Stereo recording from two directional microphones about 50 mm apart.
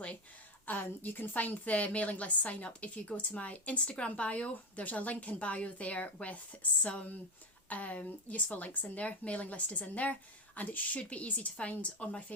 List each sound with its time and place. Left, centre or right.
0.6 s a woman's voice: left